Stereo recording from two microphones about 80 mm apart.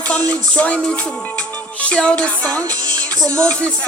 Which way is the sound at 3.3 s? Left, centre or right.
Centre.